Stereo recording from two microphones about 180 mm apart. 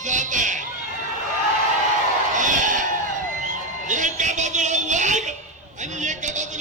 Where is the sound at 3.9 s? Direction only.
45° right (ahead or behind).